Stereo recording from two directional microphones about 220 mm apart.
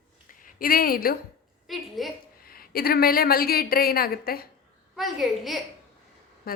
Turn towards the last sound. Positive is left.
turn(degrees=0)  # may be behind; listen again after turning